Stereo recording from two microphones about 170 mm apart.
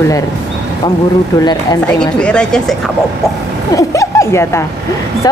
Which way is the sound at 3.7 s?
20° left (ahead or behind).